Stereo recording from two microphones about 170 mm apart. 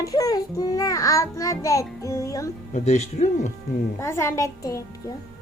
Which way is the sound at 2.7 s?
45° left (ahead or behind).